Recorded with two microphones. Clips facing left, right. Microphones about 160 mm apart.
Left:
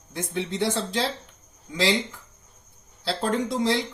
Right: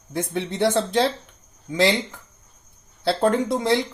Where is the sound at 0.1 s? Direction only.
60° right (ahead or behind).